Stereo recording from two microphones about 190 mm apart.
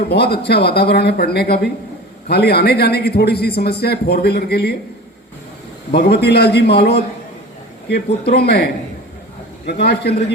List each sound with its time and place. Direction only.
0.1 s a man's voice: 60° left (ahead or behind)
5.9 s a man's voice: 60° left (ahead or behind)
8.3 s a man's voice: 60° left (ahead or behind)